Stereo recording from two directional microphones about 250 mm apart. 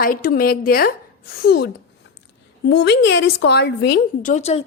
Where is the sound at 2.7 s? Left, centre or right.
Left.